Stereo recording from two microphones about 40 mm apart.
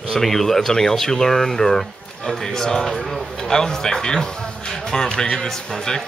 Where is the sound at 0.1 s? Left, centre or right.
Centre.